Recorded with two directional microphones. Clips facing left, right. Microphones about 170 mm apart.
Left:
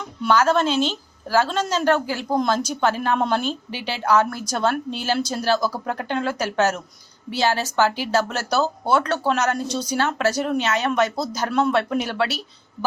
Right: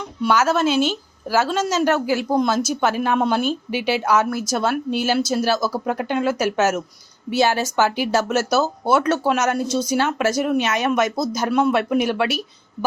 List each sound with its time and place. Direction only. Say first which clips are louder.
0.3 s a woman's voice: even; 10° right (ahead or behind)